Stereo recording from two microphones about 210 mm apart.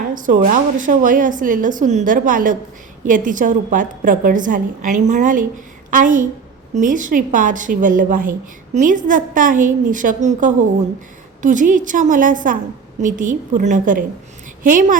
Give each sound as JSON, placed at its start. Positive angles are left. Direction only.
{"t": 0.1, "sound": "a woman's voice", "side_deg": -40}